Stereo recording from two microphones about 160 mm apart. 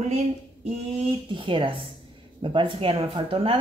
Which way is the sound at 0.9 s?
30° right (ahead or behind).